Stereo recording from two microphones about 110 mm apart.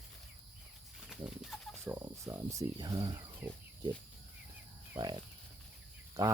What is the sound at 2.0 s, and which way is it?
Speech, 30° right (ahead or behind).